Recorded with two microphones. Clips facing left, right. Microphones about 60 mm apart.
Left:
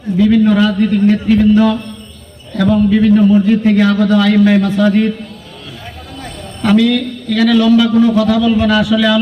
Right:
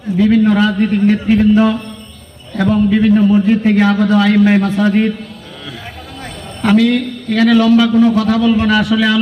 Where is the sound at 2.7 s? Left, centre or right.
Right.